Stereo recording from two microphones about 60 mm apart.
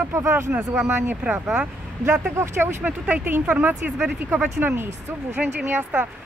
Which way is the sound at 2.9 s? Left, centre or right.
Right.